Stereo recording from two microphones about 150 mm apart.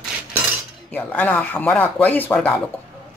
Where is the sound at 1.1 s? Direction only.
10° left (ahead or behind).